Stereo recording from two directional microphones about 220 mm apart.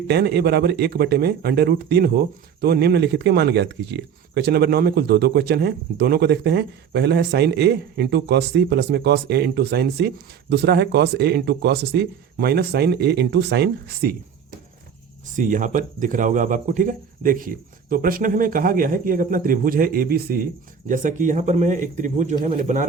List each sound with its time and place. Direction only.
0.1 s speech: 50° right (ahead or behind)
15.4 s speech: 35° right (ahead or behind)